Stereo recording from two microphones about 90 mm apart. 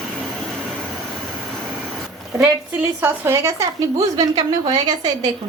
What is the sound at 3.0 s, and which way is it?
A woman's voice, 30° right (ahead or behind).